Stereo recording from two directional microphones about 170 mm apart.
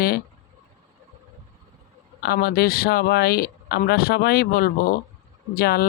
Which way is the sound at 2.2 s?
65° left (ahead or behind).